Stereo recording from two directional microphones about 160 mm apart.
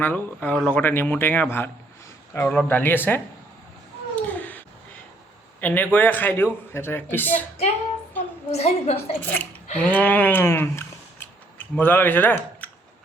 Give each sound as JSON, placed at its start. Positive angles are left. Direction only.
{"t": 0.0, "sound": "a man's voice", "side_deg": 10}
{"t": 4.1, "sound": "cat", "side_deg": 10}
{"t": 5.5, "sound": "a man's voice", "side_deg": 10}
{"t": 8.4, "sound": "a woman's voice", "side_deg": 40}
{"t": 9.2, "sound": "a man's voice", "side_deg": 10}
{"t": 9.7, "sound": "a sound", "side_deg": 10}